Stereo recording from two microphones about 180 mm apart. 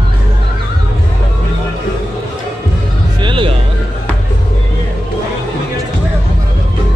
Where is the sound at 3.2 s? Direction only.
25° right (ahead or behind).